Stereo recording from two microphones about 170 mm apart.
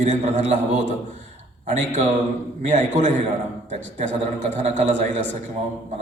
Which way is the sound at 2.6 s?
45° right (ahead or behind).